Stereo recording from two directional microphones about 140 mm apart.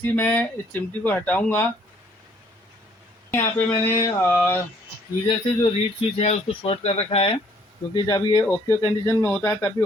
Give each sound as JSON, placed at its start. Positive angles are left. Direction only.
{"t": 0.0, "sound": "speech", "side_deg": 15}
{"t": 3.3, "sound": "speech", "side_deg": 20}
{"t": 5.2, "sound": "speech", "side_deg": 40}
{"t": 7.9, "sound": "speech", "side_deg": 30}